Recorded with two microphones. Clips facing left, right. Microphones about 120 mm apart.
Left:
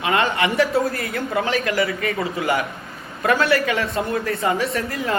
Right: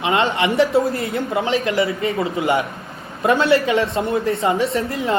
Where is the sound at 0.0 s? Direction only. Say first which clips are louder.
Right 2 dB; 25° right (ahead or behind).